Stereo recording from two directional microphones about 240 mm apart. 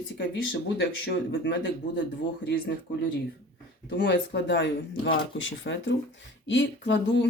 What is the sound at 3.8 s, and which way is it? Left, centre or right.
Speech, left.